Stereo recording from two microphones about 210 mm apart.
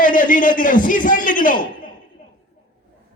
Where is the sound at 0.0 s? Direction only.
40° left (ahead or behind).